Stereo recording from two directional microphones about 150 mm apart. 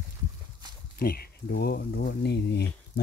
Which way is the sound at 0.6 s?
30° right (ahead or behind).